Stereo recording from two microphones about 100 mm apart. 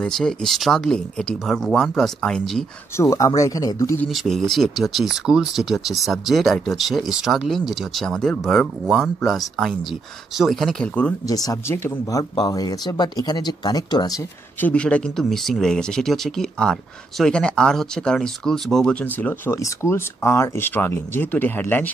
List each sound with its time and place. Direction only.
0.0 s speech: 5° left (ahead or behind)
3.0 s speech: 30° left (ahead or behind)
4.1 s speech: centre (ahead or behind)
11.2 s speech: 40° left (ahead or behind)
11.6 s speech: 25° left (ahead or behind); by 14.2 s 40° left (ahead or behind)
14.6 s speech: 10° left (ahead or behind)